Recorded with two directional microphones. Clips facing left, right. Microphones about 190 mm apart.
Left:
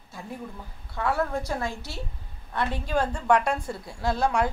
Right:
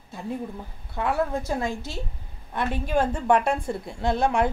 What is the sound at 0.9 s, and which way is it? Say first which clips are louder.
A woman's voice: right 1 dB; 15° right (ahead or behind).